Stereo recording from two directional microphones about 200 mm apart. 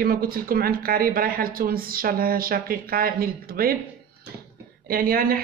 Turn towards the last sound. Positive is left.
turn(degrees=-45)  # may be behind; listen again after turning